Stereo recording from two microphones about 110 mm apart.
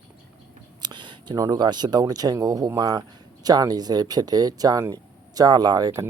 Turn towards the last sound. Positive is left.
turn(degrees=-35)  # may be behind; listen again after turning